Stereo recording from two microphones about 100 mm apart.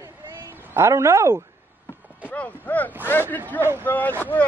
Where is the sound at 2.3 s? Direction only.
15° left (ahead or behind).